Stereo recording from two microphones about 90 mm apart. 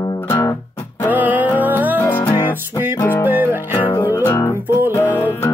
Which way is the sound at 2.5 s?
20° right (ahead or behind).